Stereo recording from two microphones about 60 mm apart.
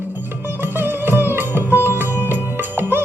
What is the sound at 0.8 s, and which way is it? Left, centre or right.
Music, right.